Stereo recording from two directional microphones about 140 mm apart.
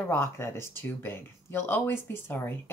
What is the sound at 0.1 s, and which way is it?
Speech, 15° left (ahead or behind).